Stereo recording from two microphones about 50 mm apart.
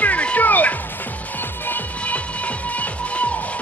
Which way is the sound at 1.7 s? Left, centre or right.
Left.